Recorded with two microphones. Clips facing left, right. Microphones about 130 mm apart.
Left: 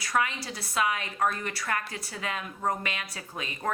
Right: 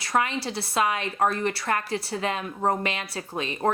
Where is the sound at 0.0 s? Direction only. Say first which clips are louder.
Right 4 dB; 30° right (ahead or behind).